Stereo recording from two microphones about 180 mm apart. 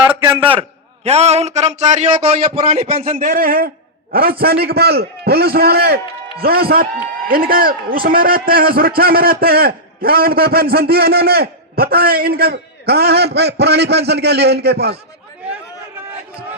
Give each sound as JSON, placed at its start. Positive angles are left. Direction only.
{"t": 0.1, "sound": "a man's voice", "side_deg": -10}
{"t": 1.0, "sound": "a man's voice", "side_deg": -35}
{"t": 3.2, "sound": "a man's voice", "side_deg": -50}